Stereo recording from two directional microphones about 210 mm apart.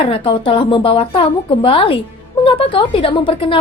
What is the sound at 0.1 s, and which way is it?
Speech, 25° left (ahead or behind).